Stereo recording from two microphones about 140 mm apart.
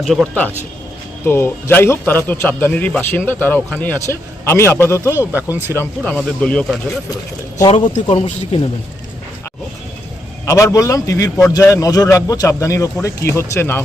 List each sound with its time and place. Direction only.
0.0 s speech: centre (ahead or behind)
1.2 s a man's voice: 15° left (ahead or behind)
5.3 s speech: 15° right (ahead or behind)
6.0 s speech: 5° left (ahead or behind)
8.1 s speech: 45° left (ahead or behind)
10.4 s a man's voice: 20° left (ahead or behind)